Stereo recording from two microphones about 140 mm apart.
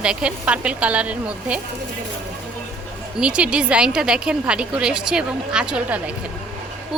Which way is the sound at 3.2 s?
5° right (ahead or behind).